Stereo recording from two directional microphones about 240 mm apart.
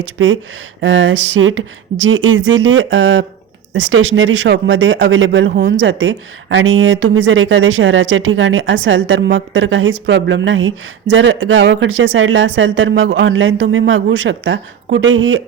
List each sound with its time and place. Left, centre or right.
0.2 s speech: right